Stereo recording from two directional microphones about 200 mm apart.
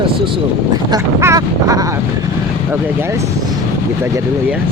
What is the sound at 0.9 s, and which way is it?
Speech, 15° right (ahead or behind).